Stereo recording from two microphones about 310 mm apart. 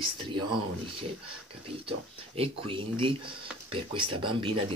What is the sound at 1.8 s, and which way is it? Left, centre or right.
Speech, centre.